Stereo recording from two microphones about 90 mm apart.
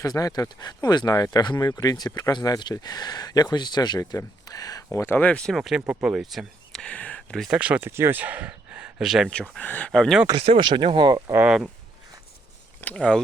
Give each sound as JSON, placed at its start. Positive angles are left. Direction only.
{"t": 0.0, "sound": "speech", "side_deg": 40}
{"t": 4.4, "sound": "a sound", "side_deg": 45}
{"t": 5.0, "sound": "speech", "side_deg": 20}
{"t": 5.5, "sound": "speech", "side_deg": 0}
{"t": 6.7, "sound": "a sound", "side_deg": 10}
{"t": 7.5, "sound": "speech", "side_deg": -15}
{"t": 7.9, "sound": "speech", "side_deg": -25}
{"t": 9.3, "sound": "speech", "side_deg": 10}
{"t": 9.9, "sound": "speech", "side_deg": 5}
{"t": 10.3, "sound": "speech", "side_deg": -75}
{"t": 11.4, "sound": "speech", "side_deg": -5}
{"t": 12.8, "sound": "speech", "side_deg": 15}